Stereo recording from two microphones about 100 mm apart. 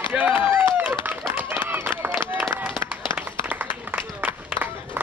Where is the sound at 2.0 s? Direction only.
10° right (ahead or behind).